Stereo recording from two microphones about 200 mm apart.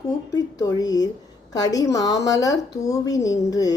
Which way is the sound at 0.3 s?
20° left (ahead or behind).